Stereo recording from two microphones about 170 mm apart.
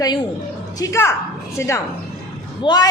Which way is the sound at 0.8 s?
15° left (ahead or behind).